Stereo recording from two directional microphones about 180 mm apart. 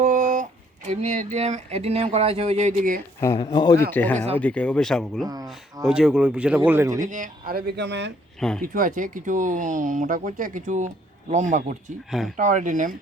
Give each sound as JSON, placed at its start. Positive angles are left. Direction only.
{"t": 0.0, "sound": "music", "side_deg": -45}
{"t": 0.9, "sound": "speech", "side_deg": -40}
{"t": 3.2, "sound": "speech", "side_deg": 20}
{"t": 3.9, "sound": "speech", "side_deg": 10}
{"t": 7.0, "sound": "speech", "side_deg": -45}
{"t": 8.4, "sound": "speech", "side_deg": 5}
{"t": 8.6, "sound": "speech", "side_deg": -50}